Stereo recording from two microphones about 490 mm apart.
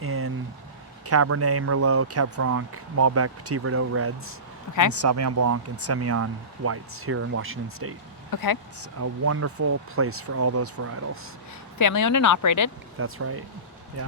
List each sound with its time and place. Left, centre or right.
0.0 s vehicle: right
1.0 s speech: right
8.3 s speech: left
8.8 s speech: right
11.8 s speech: left
13.0 s speech: right